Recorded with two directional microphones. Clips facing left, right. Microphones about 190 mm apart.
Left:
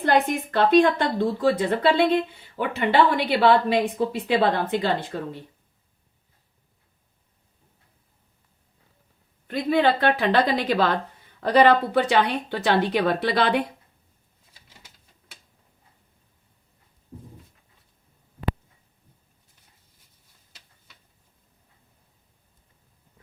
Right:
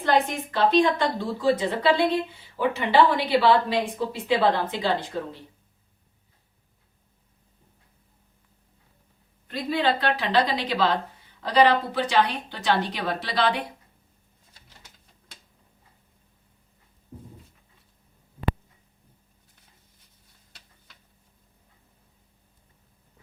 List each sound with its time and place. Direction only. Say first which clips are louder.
0.0 s speech: left 2 dB; 50° left (ahead or behind)
9.5 s a woman's voice: left 4 dB; 55° left (ahead or behind)